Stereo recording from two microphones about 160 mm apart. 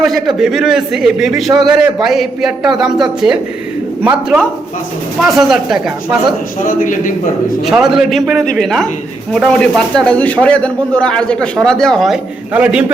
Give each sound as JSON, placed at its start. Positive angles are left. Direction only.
{"t": 0.0, "sound": "a man's voice", "side_deg": 0}
{"t": 6.7, "sound": "a man's voice", "side_deg": 55}
{"t": 7.7, "sound": "a man's voice", "side_deg": -5}